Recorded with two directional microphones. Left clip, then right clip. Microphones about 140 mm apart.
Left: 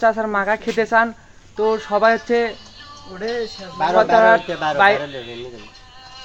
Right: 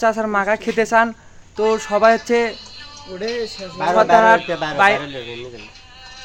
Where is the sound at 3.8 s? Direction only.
5° left (ahead or behind).